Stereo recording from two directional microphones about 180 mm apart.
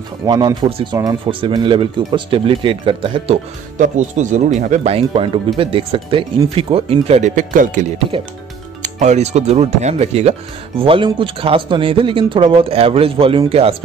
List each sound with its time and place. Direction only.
0.3 s a man's voice: 25° right (ahead or behind)
3.7 s speech: 45° right (ahead or behind)
8.8 s a man's voice: 40° right (ahead or behind)